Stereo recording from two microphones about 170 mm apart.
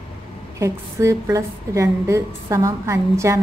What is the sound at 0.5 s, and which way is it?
A woman's voice, 20° right (ahead or behind).